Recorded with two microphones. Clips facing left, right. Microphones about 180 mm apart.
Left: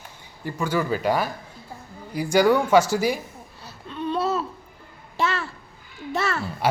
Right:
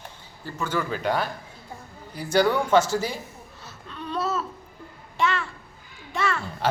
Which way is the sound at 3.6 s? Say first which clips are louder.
Left 8 dB; 30° left (ahead or behind).